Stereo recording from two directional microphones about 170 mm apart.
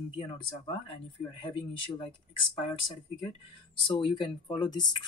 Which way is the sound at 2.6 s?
30° left (ahead or behind).